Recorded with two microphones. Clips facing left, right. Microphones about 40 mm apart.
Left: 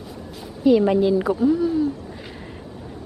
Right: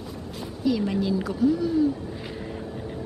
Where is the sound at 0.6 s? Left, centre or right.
Left.